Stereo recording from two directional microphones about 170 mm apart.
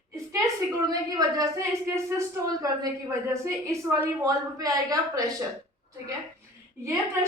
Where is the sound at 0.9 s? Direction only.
20° right (ahead or behind).